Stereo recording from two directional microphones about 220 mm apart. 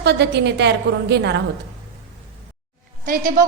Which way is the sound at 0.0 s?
50° right (ahead or behind).